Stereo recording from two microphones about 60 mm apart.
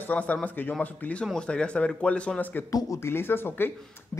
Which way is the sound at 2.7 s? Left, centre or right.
Left.